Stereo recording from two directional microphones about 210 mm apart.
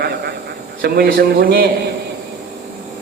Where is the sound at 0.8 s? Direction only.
50° right (ahead or behind).